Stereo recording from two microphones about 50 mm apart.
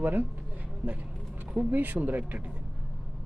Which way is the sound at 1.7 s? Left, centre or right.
Right.